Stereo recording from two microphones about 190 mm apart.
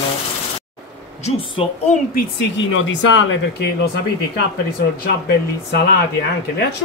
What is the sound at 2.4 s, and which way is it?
Speech, 80° left.